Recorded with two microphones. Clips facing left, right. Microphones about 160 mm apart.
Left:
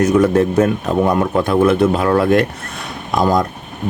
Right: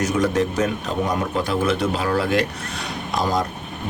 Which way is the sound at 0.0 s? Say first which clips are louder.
Left 7 dB; 55° left (ahead or behind).